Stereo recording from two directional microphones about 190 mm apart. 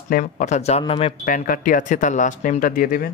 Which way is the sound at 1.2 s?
45° left (ahead or behind).